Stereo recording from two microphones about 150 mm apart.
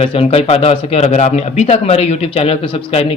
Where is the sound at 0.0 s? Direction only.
40° left (ahead or behind).